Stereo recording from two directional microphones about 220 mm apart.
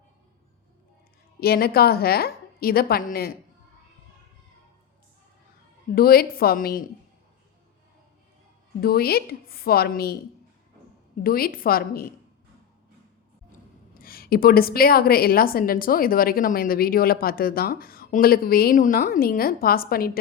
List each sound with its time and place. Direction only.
1.4 s a woman's voice: 45° left (ahead or behind)
5.9 s a woman's voice: 45° left (ahead or behind)
8.8 s a woman's voice: 45° left (ahead or behind)
11.2 s a woman's voice: 40° left (ahead or behind)
14.0 s a woman's voice: 40° left (ahead or behind)